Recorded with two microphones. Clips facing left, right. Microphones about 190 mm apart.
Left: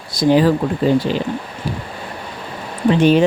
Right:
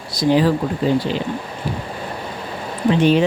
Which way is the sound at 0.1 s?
50° left (ahead or behind).